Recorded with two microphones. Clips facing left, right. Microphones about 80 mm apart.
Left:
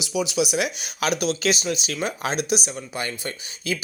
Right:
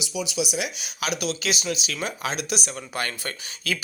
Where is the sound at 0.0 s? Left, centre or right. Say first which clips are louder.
Left 5 dB; left.